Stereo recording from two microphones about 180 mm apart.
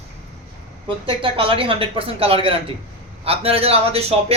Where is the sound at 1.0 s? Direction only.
30° right (ahead or behind).